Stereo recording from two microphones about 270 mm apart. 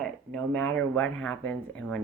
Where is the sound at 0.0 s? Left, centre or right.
Centre.